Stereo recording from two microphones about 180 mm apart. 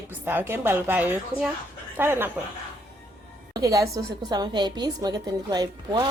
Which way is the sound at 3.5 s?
20° right (ahead or behind).